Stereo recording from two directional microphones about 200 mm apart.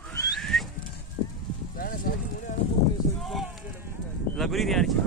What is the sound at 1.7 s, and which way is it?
Clip-clop, 45° left (ahead or behind).